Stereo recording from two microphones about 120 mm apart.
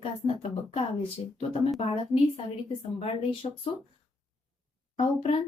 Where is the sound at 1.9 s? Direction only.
50° left (ahead or behind).